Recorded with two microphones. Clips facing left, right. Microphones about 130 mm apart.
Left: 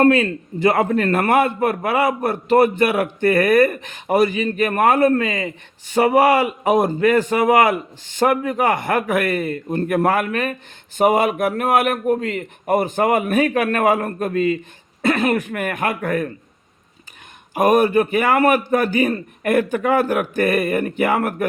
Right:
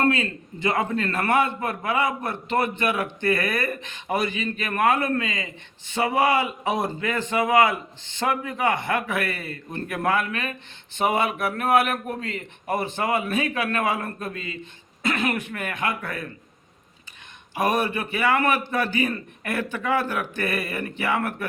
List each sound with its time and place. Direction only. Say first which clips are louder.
0.0 s a man's voice: left 8 dB; 50° left (ahead or behind)
2.3 s a man's voice: left 10 dB; 40° left (ahead or behind)
5.2 s a man's voice: left 8 dB; 50° left (ahead or behind)
17.5 s a man's voice: left 9 dB; 45° left (ahead or behind)